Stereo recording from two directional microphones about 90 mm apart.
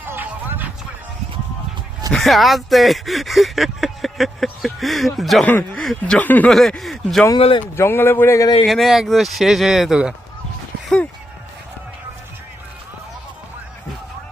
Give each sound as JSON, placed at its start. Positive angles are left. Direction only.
{"t": 0.0, "sound": "music", "side_deg": -20}
{"t": 2.1, "sound": "speech", "side_deg": 0}
{"t": 5.5, "sound": "speech", "side_deg": 20}
{"t": 5.8, "sound": "speech", "side_deg": 5}
{"t": 6.1, "sound": "speech", "side_deg": 20}
{"t": 6.5, "sound": "speech", "side_deg": 5}
{"t": 7.3, "sound": "speech", "side_deg": 90}
{"t": 7.8, "sound": "speech", "side_deg": 25}
{"t": 8.6, "sound": "speech", "side_deg": 0}